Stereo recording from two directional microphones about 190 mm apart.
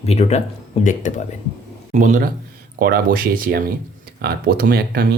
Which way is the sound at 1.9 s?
40° right (ahead or behind).